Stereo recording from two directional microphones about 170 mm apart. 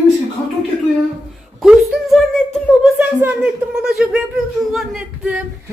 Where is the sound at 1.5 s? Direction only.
Centre (ahead or behind).